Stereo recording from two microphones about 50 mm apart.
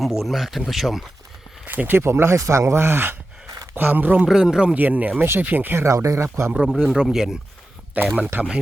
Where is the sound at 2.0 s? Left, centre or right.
Right.